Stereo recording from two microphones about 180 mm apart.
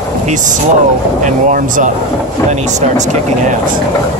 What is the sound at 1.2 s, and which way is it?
Speech, 45° right (ahead or behind).